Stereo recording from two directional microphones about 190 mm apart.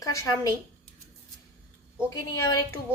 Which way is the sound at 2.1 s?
15° left (ahead or behind).